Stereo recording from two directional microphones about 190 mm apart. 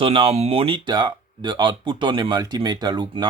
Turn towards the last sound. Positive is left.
turn(degrees=-25)  # may be behind; listen again after turning